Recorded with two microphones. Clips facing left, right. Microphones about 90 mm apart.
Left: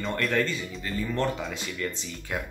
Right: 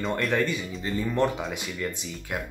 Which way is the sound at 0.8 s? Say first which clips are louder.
Right 3 dB; 15° right (ahead or behind).